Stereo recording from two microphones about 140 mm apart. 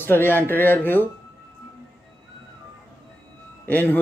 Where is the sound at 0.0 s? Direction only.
15° left (ahead or behind).